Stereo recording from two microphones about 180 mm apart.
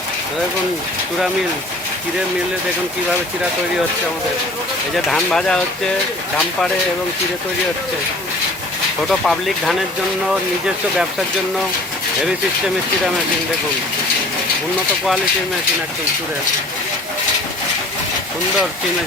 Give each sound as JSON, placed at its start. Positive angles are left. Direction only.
{"t": 5.0, "sound": "speech", "side_deg": 5}
{"t": 9.0, "sound": "speech", "side_deg": 0}